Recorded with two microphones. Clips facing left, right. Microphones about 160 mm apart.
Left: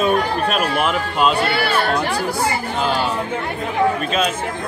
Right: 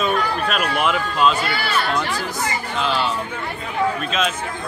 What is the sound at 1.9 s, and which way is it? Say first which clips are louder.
Speech: left 4 dB; 35° left (ahead or behind).